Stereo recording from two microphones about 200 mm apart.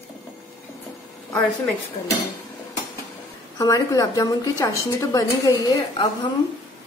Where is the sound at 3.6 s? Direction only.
15° left (ahead or behind).